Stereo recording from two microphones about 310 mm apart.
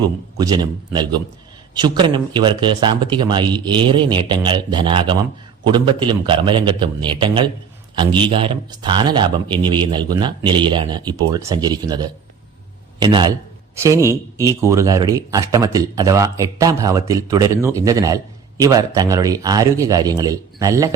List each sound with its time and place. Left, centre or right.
0.3 s a man's voice: centre